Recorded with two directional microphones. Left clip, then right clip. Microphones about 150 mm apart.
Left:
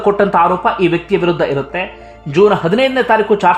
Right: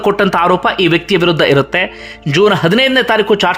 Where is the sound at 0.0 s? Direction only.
20° right (ahead or behind).